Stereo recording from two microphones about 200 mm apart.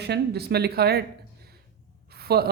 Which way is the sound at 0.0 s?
55° right (ahead or behind).